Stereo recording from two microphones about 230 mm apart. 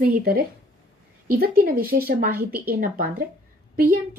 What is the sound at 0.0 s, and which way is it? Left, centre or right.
A woman's voice, right.